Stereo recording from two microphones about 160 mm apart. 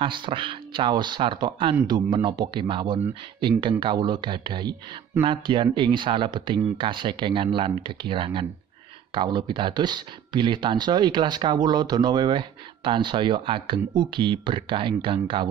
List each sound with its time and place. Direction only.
0.0 s speech: 30° right (ahead or behind)